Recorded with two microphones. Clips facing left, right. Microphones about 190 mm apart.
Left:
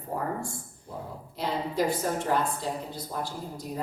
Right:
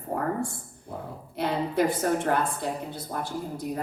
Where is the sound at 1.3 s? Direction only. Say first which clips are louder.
Right 3 dB; 60° right (ahead or behind).